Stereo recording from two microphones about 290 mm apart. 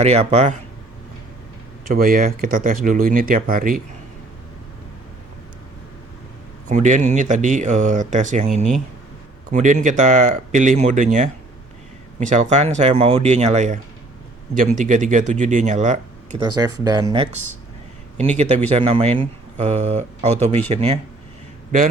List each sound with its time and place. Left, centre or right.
0.0 s speech: right
1.9 s speech: right
6.7 s speech: right
16.8 s speech: centre